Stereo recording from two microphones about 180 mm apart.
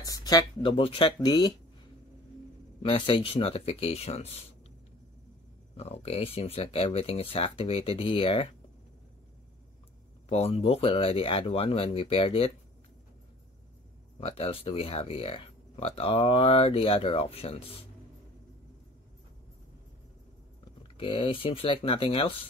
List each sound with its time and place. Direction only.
0.0 s speech: 20° left (ahead or behind)
2.8 s speech: 30° left (ahead or behind)
5.8 s speech: 35° left (ahead or behind)
10.3 s speech: 35° left (ahead or behind)
14.2 s speech: 30° left (ahead or behind)
20.8 s speech: 30° left (ahead or behind)